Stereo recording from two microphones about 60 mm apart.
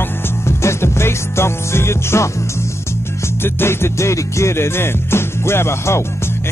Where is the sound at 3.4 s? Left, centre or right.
Left.